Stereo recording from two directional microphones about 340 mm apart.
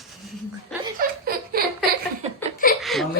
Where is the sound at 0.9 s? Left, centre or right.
Right.